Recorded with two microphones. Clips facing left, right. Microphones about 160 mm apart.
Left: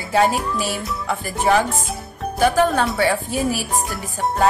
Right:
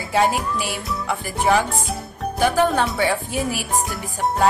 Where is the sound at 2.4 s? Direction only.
15° right (ahead or behind).